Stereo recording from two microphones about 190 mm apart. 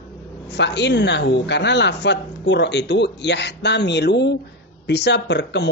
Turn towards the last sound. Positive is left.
turn(degrees=65)  # may be behind; listen again after turning